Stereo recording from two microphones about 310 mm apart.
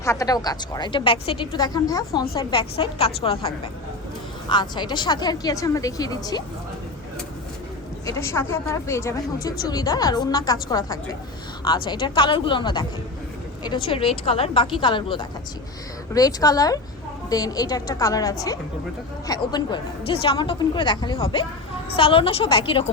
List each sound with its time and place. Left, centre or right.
0.0 s speech: centre
8.0 s speech: centre